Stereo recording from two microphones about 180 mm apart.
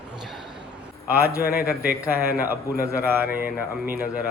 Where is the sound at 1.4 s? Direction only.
55° left (ahead or behind).